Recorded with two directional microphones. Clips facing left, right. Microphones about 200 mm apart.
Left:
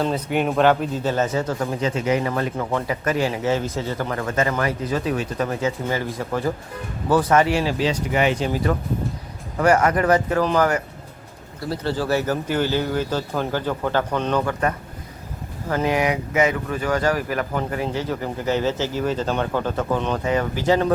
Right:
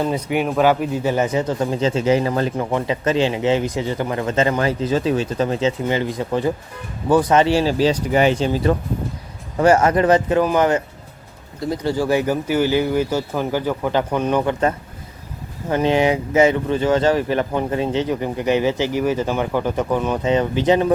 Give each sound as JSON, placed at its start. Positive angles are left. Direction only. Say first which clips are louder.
{"t": 0.0, "sound": "speech", "louder": "right 1 dB", "side_deg": -10}
{"t": 7.4, "sound": "speech", "louder": "right 5 dB", "side_deg": -30}
{"t": 15.7, "sound": "speech", "louder": "right 4 dB", "side_deg": -25}